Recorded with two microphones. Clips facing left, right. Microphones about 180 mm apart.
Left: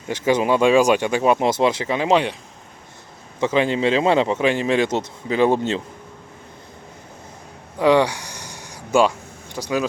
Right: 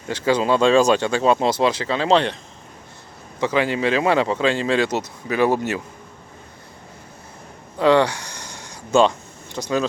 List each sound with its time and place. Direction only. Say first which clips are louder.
0.1 s speech: even; 20° left (ahead or behind)
3.4 s a man's voice: left 1 dB; 20° left (ahead or behind)
7.8 s a sound: even; 15° left (ahead or behind)
9.6 s speech: right 1 dB; 5° left (ahead or behind)